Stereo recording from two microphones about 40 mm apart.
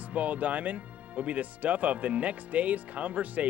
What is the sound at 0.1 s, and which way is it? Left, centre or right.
Speech, right.